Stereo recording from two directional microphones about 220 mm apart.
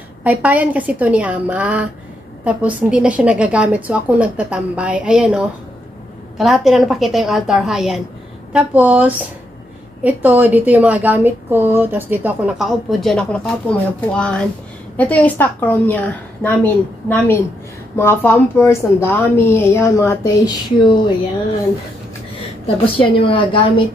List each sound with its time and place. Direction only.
0.2 s a woman's voice: 5° right (ahead or behind); by 21.0 s 15° left (ahead or behind)
22.9 s a woman's voice: 20° left (ahead or behind)